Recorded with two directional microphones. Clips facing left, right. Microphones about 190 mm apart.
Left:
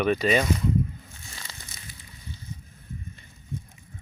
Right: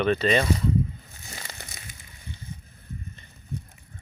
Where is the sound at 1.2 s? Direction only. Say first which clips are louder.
Right 7 dB; 40° right (ahead or behind).